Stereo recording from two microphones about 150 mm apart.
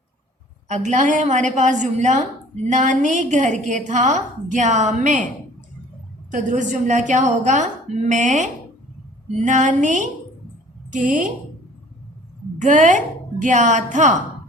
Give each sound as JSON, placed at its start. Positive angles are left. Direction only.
{"t": 0.7, "sound": "a woman's voice", "side_deg": -50}
{"t": 6.3, "sound": "a woman's voice", "side_deg": -55}
{"t": 12.5, "sound": "a woman's voice", "side_deg": -55}